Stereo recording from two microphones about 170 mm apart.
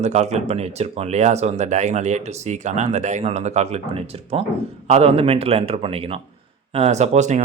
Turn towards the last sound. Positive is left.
turn(degrees=-45)  # may be behind; listen again after turning